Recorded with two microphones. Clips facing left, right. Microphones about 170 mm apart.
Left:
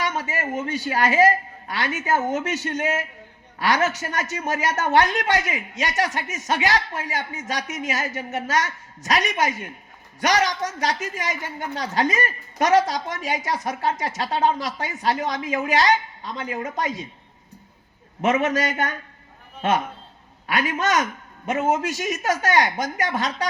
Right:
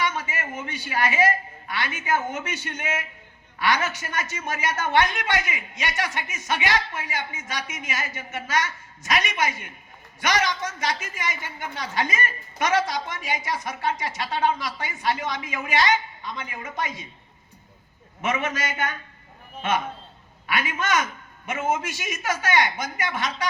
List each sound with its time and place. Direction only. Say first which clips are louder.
0.0 s a woman's voice: left 2 dB; 40° left (ahead or behind)
18.2 s a woman's voice: left 6 dB; 40° left (ahead or behind)
20.5 s a woman's voice: left 3 dB; 40° left (ahead or behind)